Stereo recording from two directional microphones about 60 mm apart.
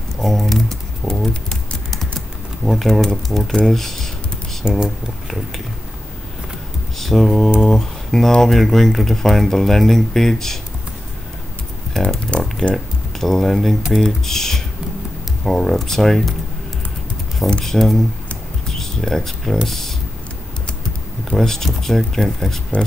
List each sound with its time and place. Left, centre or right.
0.2 s typing: centre
3.5 s speech: centre
4.6 s speech: centre
7.0 s typing: centre
7.7 s speech: centre
11.9 s typing: centre
12.3 s a sound: centre
12.7 s speech: centre
17.5 s speech: centre
21.4 s speech: centre